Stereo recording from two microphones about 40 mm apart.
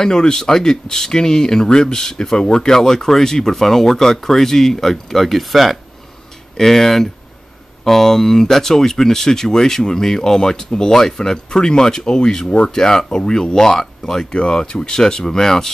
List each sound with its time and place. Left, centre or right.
0.0 s speech: centre